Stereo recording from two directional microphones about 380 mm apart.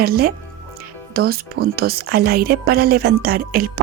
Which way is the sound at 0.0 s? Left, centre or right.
Right.